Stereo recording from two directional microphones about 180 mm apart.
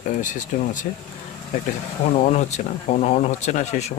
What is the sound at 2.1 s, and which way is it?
Speech, 40° left (ahead or behind).